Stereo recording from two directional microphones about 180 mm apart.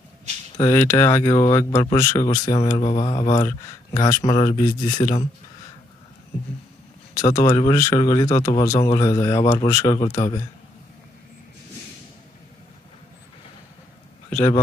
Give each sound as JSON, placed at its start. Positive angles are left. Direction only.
{"t": 0.6, "sound": "speech", "side_deg": 15}
{"t": 2.8, "sound": "speech", "side_deg": 30}
{"t": 3.3, "sound": "speech", "side_deg": 20}
{"t": 7.2, "sound": "speech", "side_deg": 20}
{"t": 9.4, "sound": "speech", "side_deg": 35}
{"t": 9.7, "sound": "speech", "side_deg": 15}
{"t": 14.3, "sound": "a man's voice", "side_deg": 15}